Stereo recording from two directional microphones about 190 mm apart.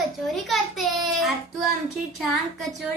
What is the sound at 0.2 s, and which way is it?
Child singing, centre (ahead or behind).